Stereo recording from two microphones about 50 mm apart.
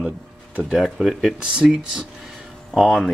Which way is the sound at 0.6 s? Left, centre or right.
Centre.